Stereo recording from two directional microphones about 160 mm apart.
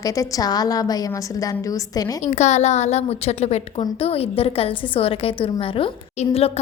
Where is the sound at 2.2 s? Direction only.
45° left (ahead or behind).